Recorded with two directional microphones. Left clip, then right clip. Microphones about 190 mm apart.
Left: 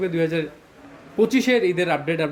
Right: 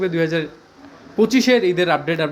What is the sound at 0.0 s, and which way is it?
Speech, centre (ahead or behind).